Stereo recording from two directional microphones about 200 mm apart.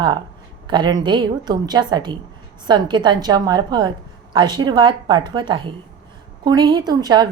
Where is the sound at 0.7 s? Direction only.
20° right (ahead or behind).